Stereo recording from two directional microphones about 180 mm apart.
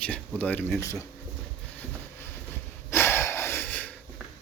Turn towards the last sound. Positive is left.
turn(degrees=10)  # may be behind; listen again after turning